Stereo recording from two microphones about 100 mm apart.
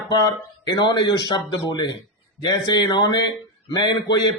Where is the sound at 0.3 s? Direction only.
45° left (ahead or behind).